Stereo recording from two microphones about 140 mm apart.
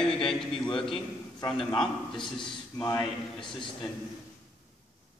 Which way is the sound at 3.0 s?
5° left (ahead or behind).